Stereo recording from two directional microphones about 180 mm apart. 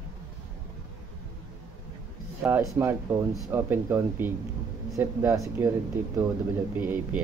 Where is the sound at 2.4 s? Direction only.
15° right (ahead or behind).